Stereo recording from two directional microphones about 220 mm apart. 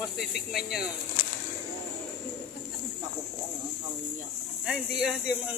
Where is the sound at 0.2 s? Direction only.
Centre (ahead or behind).